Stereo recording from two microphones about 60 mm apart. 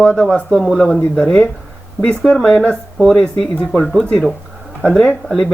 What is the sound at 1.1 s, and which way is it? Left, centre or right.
Speech, centre.